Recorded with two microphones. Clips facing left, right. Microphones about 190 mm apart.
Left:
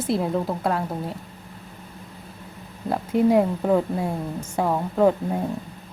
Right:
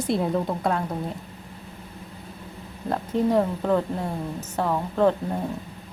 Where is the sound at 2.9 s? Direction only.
10° left (ahead or behind).